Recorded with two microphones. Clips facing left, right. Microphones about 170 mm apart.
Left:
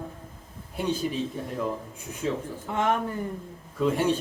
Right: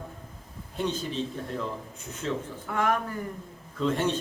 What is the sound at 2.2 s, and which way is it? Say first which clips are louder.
Speech: left 2 dB; 20° left (ahead or behind).